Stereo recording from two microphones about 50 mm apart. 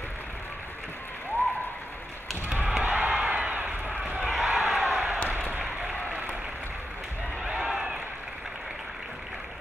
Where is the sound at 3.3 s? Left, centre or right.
Right.